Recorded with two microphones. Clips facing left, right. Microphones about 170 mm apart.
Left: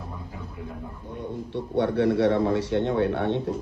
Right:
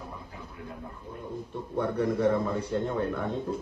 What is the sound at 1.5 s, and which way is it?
A man's voice, 85° left.